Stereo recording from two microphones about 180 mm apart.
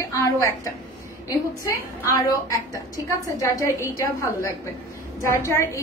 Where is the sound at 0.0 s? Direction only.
15° left (ahead or behind).